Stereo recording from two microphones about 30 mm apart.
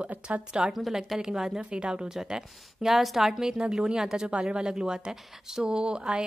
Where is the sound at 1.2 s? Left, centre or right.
Right.